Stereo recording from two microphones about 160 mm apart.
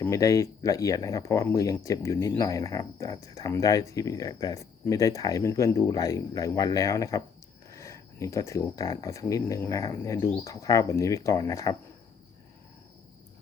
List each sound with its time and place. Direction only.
0.0 s speech: 20° left (ahead or behind)